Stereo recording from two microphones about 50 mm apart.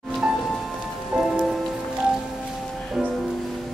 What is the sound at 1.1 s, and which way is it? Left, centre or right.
Rain on surface, right.